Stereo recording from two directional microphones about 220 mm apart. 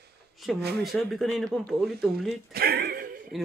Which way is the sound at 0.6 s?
45° right (ahead or behind).